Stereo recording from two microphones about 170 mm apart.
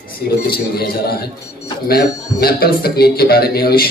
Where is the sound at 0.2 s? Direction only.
65° left (ahead or behind).